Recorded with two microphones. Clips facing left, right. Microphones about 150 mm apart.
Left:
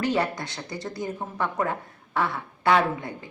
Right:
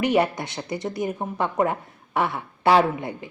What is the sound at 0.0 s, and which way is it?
A woman's voice, 20° right (ahead or behind).